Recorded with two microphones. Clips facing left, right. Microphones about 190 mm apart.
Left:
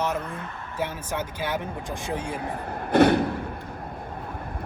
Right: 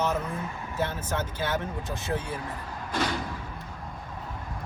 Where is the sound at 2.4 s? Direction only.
60° left (ahead or behind).